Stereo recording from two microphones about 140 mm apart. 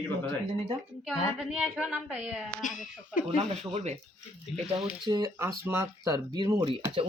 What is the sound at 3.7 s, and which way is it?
Speech, 55° right (ahead or behind).